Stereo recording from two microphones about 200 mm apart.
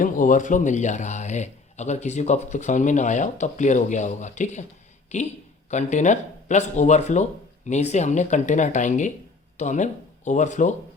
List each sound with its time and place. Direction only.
0.0 s a man's voice: 40° left (ahead or behind)